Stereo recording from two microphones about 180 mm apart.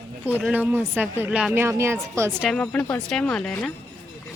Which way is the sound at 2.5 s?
5° left (ahead or behind).